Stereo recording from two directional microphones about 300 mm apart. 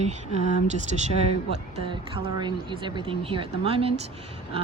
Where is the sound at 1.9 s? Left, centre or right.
Centre.